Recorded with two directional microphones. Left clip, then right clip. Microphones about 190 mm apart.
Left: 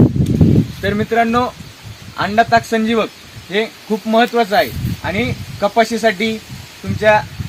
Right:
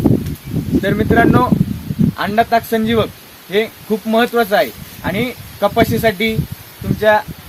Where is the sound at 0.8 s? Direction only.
Centre (ahead or behind).